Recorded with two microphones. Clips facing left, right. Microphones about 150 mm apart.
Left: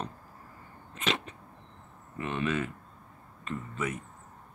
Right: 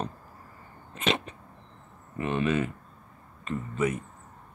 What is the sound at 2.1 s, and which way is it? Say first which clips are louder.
Speech: right 4 dB; 10° right (ahead or behind).